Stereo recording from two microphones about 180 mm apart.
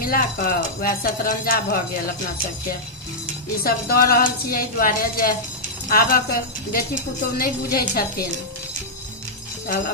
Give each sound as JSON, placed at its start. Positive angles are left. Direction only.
{"t": 0.0, "sound": "speech", "side_deg": 50}
{"t": 3.6, "sound": "a woman's voice", "side_deg": 55}